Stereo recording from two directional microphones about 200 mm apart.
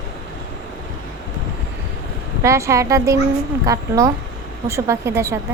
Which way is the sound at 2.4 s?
15° right (ahead or behind).